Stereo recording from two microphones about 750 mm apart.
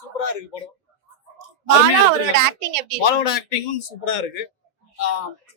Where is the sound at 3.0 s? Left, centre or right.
Left.